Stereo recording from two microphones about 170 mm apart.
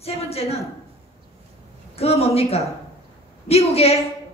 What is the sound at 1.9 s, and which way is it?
A woman's voice, 35° left (ahead or behind).